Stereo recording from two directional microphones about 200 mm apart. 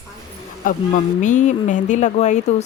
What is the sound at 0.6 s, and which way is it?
Speech, 45° left (ahead or behind).